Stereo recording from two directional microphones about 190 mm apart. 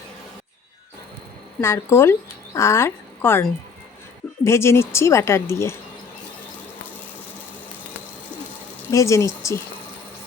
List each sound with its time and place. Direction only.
1.6 s a woman's voice: 15° left (ahead or behind)
8.9 s a woman's voice: 15° left (ahead or behind)